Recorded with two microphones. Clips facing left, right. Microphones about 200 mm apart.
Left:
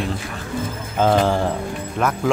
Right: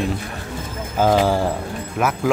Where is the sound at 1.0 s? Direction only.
10° right (ahead or behind).